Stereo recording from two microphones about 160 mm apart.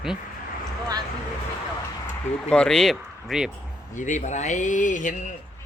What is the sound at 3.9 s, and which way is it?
Speech, 50° left (ahead or behind).